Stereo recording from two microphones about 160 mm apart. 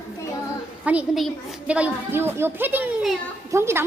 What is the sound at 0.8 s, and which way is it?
A woman's voice, 10° right (ahead or behind).